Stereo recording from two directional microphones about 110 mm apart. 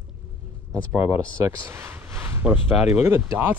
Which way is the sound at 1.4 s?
20° right (ahead or behind).